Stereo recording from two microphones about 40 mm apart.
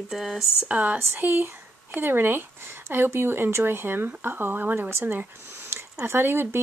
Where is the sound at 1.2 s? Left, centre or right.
Right.